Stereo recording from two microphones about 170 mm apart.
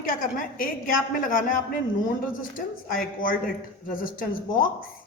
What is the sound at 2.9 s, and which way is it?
A man's voice, 55° left (ahead or behind).